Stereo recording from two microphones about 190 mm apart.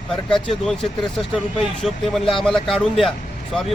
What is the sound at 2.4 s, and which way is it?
Speech, centre (ahead or behind).